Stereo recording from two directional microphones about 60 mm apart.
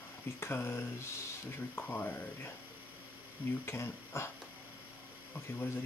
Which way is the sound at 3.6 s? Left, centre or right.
Left.